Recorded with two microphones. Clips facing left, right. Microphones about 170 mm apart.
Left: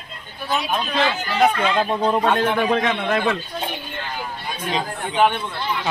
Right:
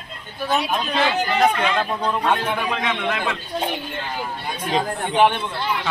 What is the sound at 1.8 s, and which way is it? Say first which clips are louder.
Speech: left 3 dB; 30° left (ahead or behind).